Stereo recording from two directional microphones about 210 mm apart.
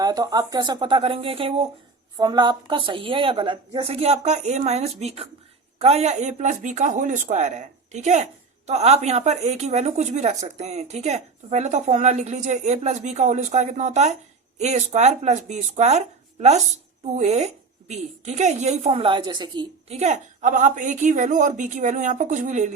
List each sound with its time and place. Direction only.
0.0 s a woman's voice: 20° right (ahead or behind); by 22.7 s 35° right (ahead or behind)